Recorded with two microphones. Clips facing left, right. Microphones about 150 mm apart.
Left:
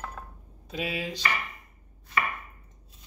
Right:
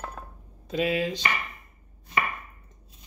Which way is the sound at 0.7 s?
5° left (ahead or behind).